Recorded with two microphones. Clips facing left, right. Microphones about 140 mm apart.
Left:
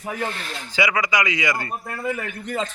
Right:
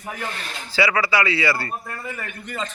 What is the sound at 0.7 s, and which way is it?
Speech, 15° left (ahead or behind).